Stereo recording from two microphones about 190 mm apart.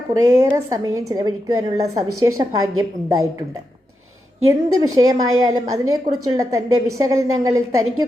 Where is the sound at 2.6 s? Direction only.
90° right.